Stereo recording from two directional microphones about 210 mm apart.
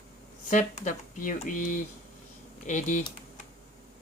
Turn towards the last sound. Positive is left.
turn(degrees=35)  # may be behind; listen again after turning